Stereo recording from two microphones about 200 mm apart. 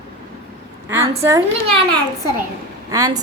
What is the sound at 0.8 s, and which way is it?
Speech, 15° right (ahead or behind).